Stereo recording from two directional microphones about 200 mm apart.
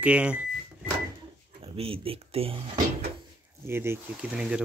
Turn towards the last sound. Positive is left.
turn(degrees=-5)  # may be behind; listen again after turning